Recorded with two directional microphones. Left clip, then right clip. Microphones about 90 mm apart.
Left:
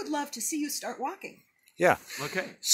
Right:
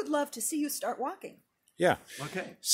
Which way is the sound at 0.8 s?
25° right (ahead or behind).